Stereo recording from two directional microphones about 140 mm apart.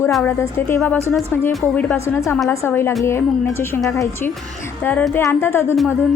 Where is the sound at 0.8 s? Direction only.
15° left (ahead or behind).